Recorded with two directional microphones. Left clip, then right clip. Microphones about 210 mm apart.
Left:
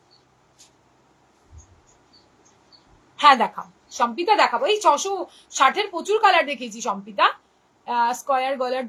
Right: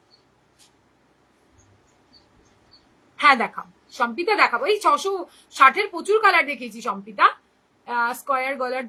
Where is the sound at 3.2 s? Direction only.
10° right (ahead or behind).